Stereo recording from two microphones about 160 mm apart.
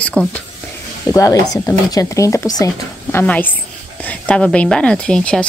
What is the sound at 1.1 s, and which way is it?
A woman's voice, 20° left (ahead or behind).